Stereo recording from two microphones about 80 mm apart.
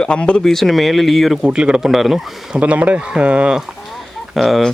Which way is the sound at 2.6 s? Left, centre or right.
Centre.